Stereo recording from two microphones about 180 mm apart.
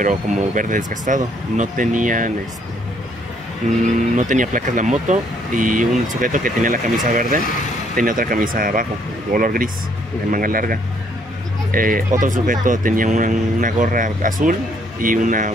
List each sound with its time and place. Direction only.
0.0 s speech: 45° right (ahead or behind)
3.8 s speech: 45° right (ahead or behind)